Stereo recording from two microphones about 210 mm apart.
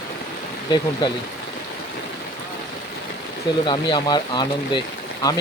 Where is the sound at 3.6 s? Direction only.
20° left (ahead or behind).